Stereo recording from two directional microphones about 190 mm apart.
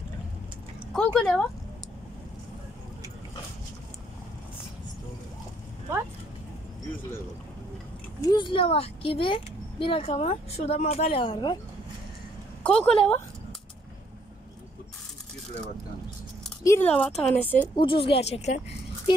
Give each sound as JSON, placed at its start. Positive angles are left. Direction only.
{"t": 0.9, "sound": "a woman's voice", "side_deg": 5}
{"t": 8.3, "sound": "speech", "side_deg": 25}
{"t": 12.6, "sound": "a woman's voice", "side_deg": 5}
{"t": 16.6, "sound": "speech", "side_deg": 10}
{"t": 17.7, "sound": "speech", "side_deg": 25}
{"t": 19.1, "sound": "speech", "side_deg": 25}